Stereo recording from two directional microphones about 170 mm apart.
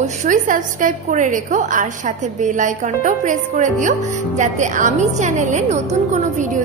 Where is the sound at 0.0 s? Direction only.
45° right (ahead or behind).